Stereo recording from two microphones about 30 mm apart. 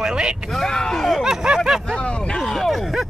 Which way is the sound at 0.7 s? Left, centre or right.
Centre.